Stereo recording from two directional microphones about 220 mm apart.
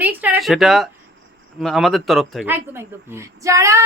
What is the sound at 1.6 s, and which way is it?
Speech, centre (ahead or behind).